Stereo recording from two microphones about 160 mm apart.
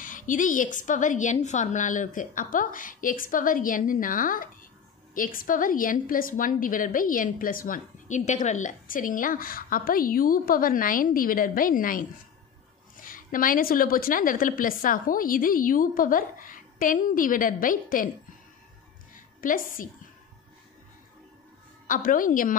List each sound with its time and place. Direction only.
0.0 s a woman's voice: 55° left (ahead or behind)
19.1 s a sound: 60° left (ahead or behind)
21.8 s a woman's voice: 55° left (ahead or behind)